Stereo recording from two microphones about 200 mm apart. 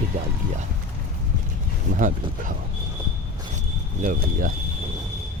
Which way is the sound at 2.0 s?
40° right (ahead or behind).